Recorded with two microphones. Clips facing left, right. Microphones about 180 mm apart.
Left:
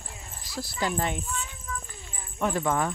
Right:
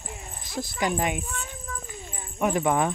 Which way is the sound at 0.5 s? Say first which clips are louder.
Right 2 dB; 20° right (ahead or behind).